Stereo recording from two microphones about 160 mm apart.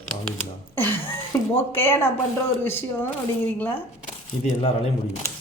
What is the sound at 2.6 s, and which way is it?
A woman's voice, 15° left (ahead or behind).